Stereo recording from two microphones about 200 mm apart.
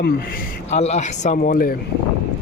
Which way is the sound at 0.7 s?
35° left (ahead or behind).